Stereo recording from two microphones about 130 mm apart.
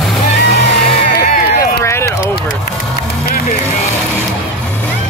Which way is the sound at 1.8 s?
20° left (ahead or behind).